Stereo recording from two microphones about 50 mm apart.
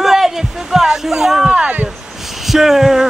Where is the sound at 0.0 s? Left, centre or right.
Centre.